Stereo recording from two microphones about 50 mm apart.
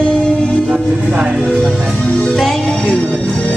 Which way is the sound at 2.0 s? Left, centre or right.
Left.